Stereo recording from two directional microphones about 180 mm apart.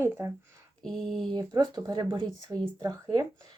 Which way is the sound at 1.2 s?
25° right (ahead or behind).